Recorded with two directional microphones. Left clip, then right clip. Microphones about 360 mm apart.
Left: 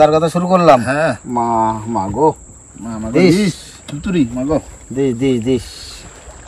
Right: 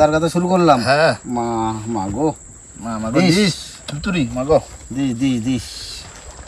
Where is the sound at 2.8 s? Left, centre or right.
Right.